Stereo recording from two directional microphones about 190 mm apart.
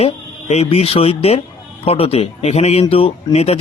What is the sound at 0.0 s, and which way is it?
Speech, 35° left (ahead or behind).